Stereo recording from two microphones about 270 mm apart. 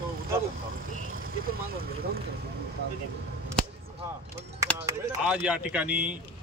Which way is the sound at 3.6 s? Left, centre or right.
Centre.